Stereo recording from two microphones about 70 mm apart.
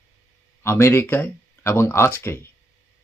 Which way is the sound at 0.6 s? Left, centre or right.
Left.